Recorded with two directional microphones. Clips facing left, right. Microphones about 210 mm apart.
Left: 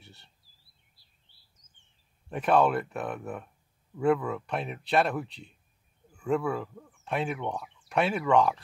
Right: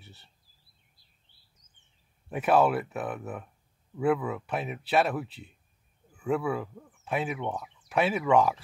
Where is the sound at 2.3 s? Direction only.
5° right (ahead or behind).